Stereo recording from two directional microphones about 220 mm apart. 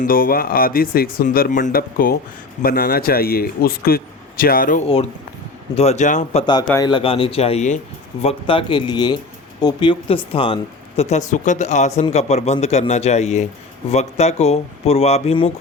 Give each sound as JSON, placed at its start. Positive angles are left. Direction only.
{"t": 0.0, "sound": "speech", "side_deg": 40}
{"t": 5.7, "sound": "speech", "side_deg": 30}
{"t": 6.4, "sound": "speech", "side_deg": 20}